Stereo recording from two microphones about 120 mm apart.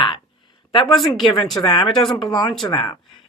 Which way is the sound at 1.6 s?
45° left (ahead or behind).